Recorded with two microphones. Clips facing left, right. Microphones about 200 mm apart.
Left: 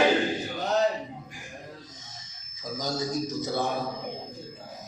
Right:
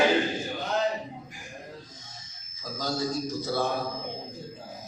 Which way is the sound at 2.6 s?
20° left (ahead or behind).